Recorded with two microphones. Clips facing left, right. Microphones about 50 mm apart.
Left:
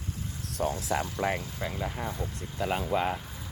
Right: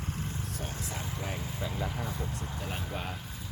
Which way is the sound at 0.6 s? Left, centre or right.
Left.